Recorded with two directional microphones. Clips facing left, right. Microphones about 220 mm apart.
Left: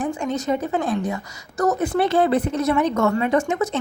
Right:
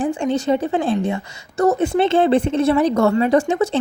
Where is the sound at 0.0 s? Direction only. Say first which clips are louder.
Right 4 dB; 30° right (ahead or behind).